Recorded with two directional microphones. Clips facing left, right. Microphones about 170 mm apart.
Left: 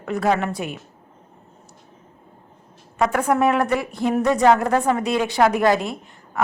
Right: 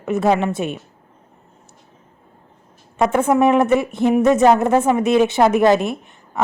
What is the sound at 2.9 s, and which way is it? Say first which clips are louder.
A woman's voice: right 4 dB; 25° right (ahead or behind).